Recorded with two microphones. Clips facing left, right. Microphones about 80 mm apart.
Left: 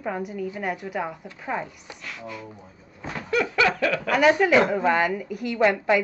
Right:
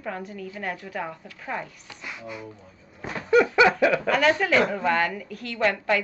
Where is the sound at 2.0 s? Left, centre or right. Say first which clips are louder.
Even; centre.